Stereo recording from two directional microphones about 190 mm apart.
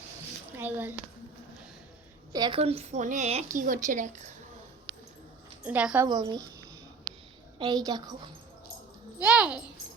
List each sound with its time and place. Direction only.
0.5 s a woman's voice: 10° right (ahead or behind)
2.3 s a woman's voice: 25° right (ahead or behind); by 4.3 s 40° right (ahead or behind)
5.6 s a woman's voice: 5° right (ahead or behind)
6.1 s speech: 20° right (ahead or behind)
7.9 s speech: 20° right (ahead or behind)
9.1 s a child's voice: 5° right (ahead or behind)